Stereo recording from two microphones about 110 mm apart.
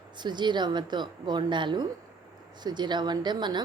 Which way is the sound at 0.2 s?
45° right (ahead or behind).